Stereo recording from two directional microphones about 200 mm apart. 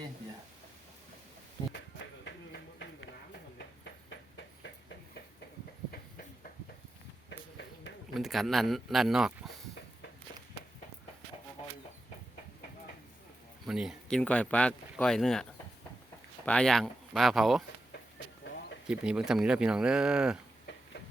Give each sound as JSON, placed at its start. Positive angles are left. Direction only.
{"t": 2.2, "sound": "a sound", "side_deg": 55}
{"t": 7.3, "sound": "a sound", "side_deg": 60}
{"t": 8.1, "sound": "speech", "side_deg": 0}
{"t": 13.7, "sound": "speech", "side_deg": 0}
{"t": 16.5, "sound": "speech", "side_deg": 5}
{"t": 18.9, "sound": "speech", "side_deg": -5}